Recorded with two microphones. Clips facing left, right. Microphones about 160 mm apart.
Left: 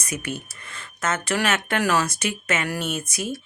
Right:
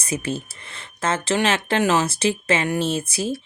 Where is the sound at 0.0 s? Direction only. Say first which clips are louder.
Right 4 dB; 30° right (ahead or behind).